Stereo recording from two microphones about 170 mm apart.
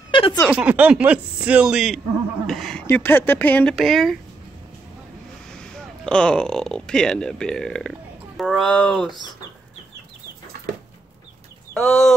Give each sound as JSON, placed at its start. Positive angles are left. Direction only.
{"t": 0.1, "sound": "a sound", "side_deg": 30}
{"t": 0.5, "sound": "speech", "side_deg": -10}
{"t": 5.5, "sound": "speech", "side_deg": 5}
{"t": 11.7, "sound": "speech", "side_deg": 5}